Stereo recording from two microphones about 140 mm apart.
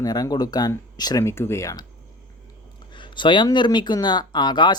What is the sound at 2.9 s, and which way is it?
Speech, 35° left (ahead or behind).